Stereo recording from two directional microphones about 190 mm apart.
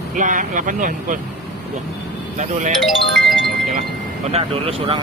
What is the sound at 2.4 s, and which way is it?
Speech, 40° right (ahead or behind).